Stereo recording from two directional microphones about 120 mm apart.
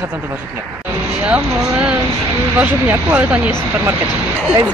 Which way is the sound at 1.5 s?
25° right (ahead or behind).